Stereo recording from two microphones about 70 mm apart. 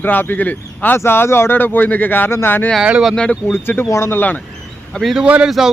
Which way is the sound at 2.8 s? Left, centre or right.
Centre.